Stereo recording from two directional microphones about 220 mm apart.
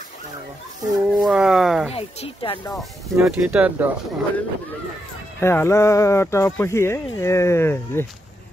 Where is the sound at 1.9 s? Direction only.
25° left (ahead or behind).